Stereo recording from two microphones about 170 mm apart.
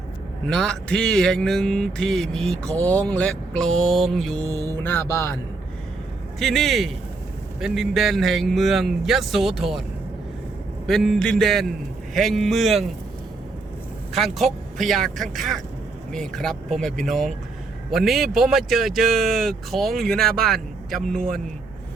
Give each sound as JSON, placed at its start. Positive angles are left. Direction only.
{"t": 0.4, "sound": "speech", "side_deg": 5}
{"t": 4.5, "sound": "speech", "side_deg": 15}
{"t": 6.4, "sound": "speech", "side_deg": 0}
{"t": 10.8, "sound": "speech", "side_deg": 0}
{"t": 14.1, "sound": "speech", "side_deg": 0}
{"t": 21.2, "sound": "a man's voice", "side_deg": -55}